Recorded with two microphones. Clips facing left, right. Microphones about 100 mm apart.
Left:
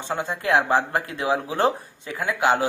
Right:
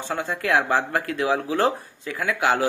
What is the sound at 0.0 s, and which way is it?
Speech, 20° left (ahead or behind).